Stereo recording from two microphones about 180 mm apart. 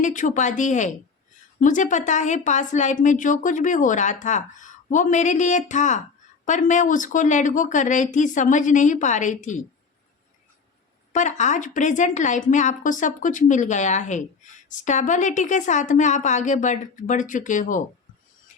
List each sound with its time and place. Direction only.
0.0 s speech: 45° left (ahead or behind)
11.1 s speech: 40° left (ahead or behind)